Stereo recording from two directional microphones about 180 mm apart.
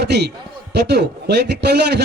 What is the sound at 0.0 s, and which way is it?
A man's voice, 65° right (ahead or behind).